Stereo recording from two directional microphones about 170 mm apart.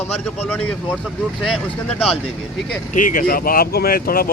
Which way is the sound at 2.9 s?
50° left (ahead or behind).